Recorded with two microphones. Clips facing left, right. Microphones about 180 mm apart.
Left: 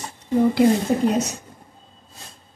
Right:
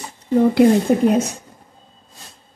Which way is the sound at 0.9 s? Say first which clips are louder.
Right 4 dB; 65° right (ahead or behind).